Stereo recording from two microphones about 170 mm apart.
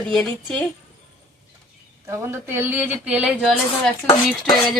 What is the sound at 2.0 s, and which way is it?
A woman's voice, 15° right (ahead or behind).